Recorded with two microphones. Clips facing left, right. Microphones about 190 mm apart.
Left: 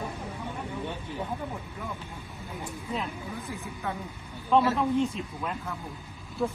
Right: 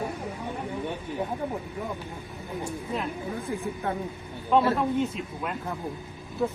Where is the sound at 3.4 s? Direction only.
30° right (ahead or behind).